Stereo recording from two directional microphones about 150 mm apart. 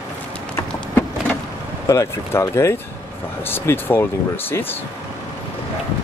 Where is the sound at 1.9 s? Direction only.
20° left (ahead or behind).